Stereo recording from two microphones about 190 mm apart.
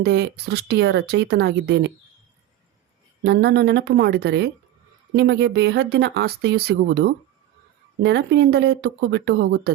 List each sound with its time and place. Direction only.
0.0 s speech: 60° right (ahead or behind)
3.2 s speech: 60° right (ahead or behind)